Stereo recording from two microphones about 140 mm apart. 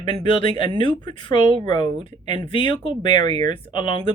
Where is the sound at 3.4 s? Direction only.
30° left (ahead or behind).